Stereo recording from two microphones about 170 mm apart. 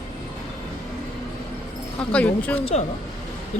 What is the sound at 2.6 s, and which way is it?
Speech, 40° left (ahead or behind).